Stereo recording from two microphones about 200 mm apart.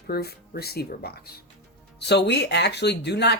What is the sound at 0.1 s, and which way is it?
Speech, 50° left (ahead or behind).